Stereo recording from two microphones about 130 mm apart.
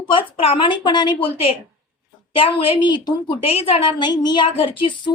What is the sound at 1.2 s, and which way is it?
A woman's voice, 45° left (ahead or behind).